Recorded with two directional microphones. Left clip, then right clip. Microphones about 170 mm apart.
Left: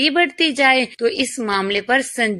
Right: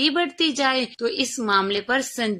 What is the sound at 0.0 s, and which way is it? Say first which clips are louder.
Speech: left 5 dB; 10° left (ahead or behind).